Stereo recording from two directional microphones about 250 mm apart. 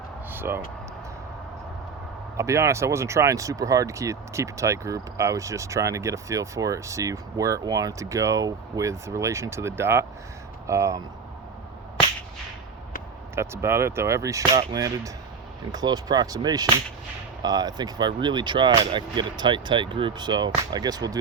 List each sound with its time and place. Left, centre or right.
0.3 s a sound: centre
2.4 s speech: centre
13.3 s speech: centre